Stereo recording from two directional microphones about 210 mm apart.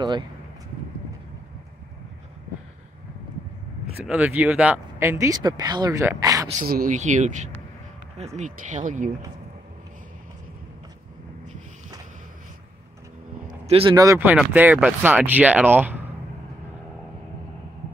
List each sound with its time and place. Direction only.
4.0 s speech: 5° right (ahead or behind)
6.6 s speech: 40° right (ahead or behind)
13.5 s speech: 30° right (ahead or behind); by 16.0 s 10° right (ahead or behind)